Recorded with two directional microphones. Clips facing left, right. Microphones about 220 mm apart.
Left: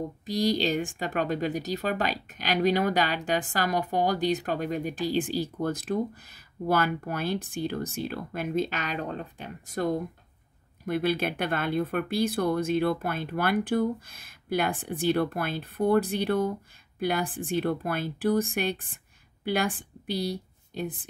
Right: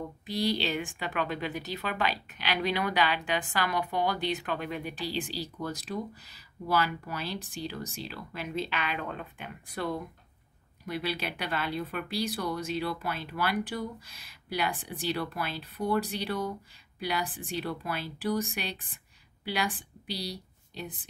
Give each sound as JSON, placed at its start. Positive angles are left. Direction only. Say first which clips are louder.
{"t": 0.0, "sound": "a woman's voice", "louder": "left 4 dB", "side_deg": 40}